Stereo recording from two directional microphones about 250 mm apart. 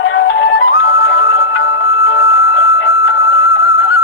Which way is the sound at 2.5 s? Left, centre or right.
Left.